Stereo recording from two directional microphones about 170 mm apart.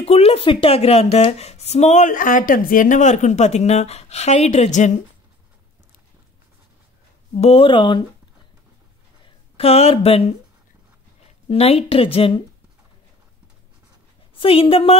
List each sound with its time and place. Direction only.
0.0 s speech: 35° left (ahead or behind)
7.3 s speech: 35° left (ahead or behind)
9.2 s speech: 35° left (ahead or behind)
11.4 s speech: 35° left (ahead or behind)
14.3 s speech: 30° left (ahead or behind)